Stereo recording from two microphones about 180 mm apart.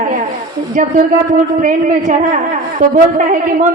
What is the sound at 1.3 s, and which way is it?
A woman's voice, 45° right (ahead or behind).